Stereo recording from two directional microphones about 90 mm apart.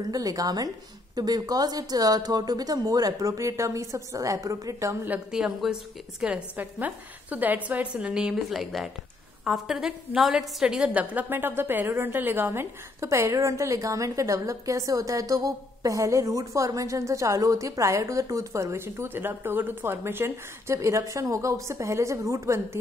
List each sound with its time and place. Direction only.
0.0 s speech: 45° right (ahead or behind)
5.3 s a woman's voice: 5° right (ahead or behind)
10.9 s a woman's voice: 20° right (ahead or behind); by 22.6 s 35° right (ahead or behind)